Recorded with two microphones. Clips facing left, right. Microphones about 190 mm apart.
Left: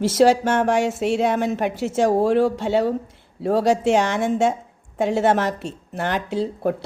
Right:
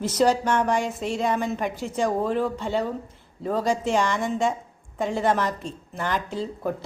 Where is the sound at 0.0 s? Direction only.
90° left.